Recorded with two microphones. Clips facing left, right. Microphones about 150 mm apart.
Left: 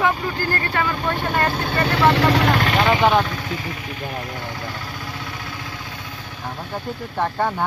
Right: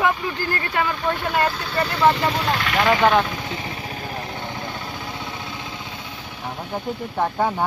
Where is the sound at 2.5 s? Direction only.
40° left (ahead or behind).